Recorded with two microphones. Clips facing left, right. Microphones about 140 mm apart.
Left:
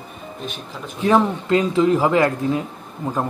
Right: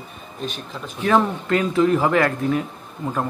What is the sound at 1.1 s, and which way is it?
A man's voice, 20° left (ahead or behind).